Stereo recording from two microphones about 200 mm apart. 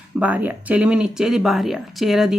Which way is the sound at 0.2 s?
5° right (ahead or behind).